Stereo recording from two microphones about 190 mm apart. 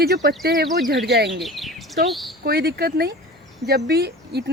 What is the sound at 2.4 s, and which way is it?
Speech, 55° right (ahead or behind).